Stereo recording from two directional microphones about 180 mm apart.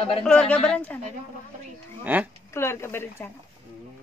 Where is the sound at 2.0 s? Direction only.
10° right (ahead or behind).